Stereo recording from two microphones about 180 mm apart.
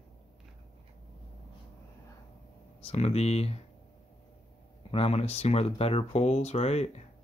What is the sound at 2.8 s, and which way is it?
Speech, 35° left (ahead or behind).